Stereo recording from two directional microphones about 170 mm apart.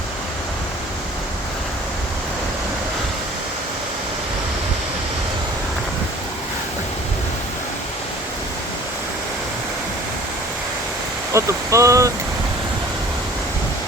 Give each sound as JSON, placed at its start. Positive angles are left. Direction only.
{"t": 11.3, "sound": "speech", "side_deg": -15}